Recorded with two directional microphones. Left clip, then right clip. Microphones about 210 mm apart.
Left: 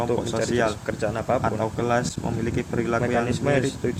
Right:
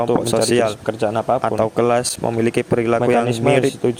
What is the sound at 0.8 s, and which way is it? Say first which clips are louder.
Speech: right 7 dB; 25° right (ahead or behind).